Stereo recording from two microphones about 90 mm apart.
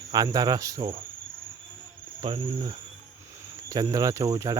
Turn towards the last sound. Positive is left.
turn(degrees=-40)  # may be behind; listen again after turning